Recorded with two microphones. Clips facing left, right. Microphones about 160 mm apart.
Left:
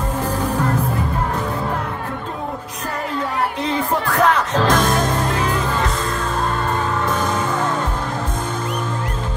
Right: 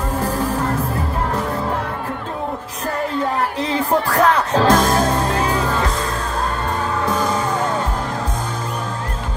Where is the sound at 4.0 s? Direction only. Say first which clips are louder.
Right 1 dB; 35° right (ahead or behind).